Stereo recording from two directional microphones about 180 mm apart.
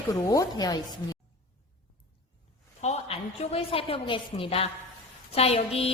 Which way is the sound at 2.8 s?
35° left (ahead or behind).